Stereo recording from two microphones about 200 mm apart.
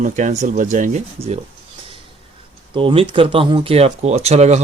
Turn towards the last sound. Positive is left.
turn(degrees=-35)  # may be behind; listen again after turning